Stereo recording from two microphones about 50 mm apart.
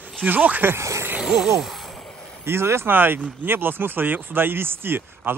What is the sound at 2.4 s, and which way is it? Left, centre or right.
Speech, right.